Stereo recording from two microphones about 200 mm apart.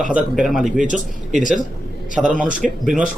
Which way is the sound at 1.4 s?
40° left (ahead or behind).